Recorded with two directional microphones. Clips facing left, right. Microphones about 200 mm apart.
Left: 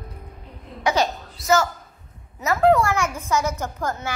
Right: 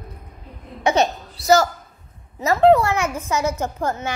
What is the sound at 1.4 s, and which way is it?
Speech, 35° right (ahead or behind).